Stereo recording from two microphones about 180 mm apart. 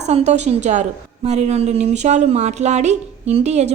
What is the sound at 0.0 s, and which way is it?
A woman's voice, 40° right (ahead or behind).